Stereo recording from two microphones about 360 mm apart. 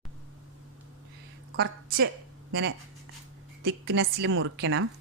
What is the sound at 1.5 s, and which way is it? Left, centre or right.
A woman's voice, right.